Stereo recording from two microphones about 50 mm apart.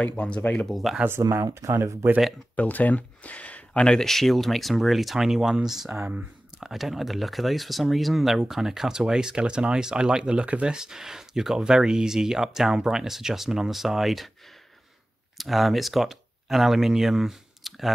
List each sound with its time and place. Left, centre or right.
0.0 s speech: left
0.7 s speech: centre
1.0 s speech: right
2.5 s speech: left
3.8 s speech: centre
15.3 s speech: centre